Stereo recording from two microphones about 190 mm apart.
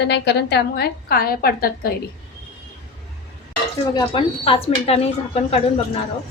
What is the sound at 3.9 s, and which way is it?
Speech, 25° left (ahead or behind).